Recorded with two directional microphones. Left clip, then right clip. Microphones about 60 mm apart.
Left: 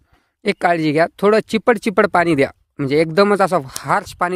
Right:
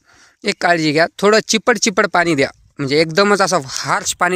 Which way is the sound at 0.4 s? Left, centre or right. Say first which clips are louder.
Right 1 dB; left.